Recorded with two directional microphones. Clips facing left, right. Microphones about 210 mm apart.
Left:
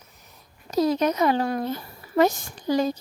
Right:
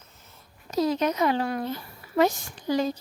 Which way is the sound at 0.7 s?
40° left (ahead or behind).